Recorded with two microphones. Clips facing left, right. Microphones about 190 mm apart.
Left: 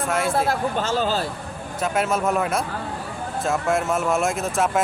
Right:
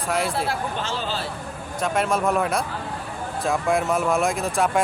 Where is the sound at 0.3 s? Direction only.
45° left (ahead or behind).